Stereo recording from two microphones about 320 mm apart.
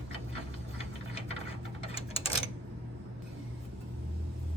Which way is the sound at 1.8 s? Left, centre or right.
Centre.